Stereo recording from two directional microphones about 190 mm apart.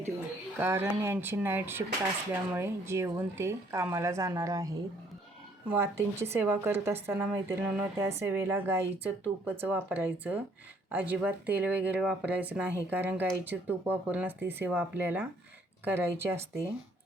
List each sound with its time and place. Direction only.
0.6 s speech: 10° right (ahead or behind)